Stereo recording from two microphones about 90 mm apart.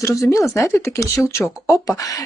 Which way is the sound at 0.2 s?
35° left (ahead or behind).